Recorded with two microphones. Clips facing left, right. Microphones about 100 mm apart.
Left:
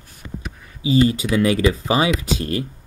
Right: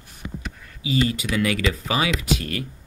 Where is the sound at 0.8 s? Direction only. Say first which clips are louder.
Left 6 dB; 30° left (ahead or behind).